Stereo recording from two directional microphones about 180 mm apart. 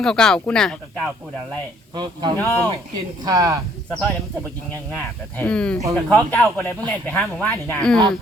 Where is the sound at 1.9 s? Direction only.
25° right (ahead or behind).